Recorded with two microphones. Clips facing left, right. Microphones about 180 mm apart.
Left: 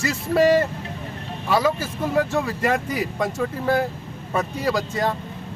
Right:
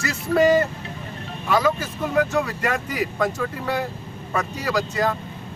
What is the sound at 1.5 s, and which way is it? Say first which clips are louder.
Speech: even; 30° left (ahead or behind).